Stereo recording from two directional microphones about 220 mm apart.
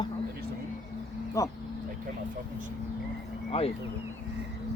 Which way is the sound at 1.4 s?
15° left (ahead or behind).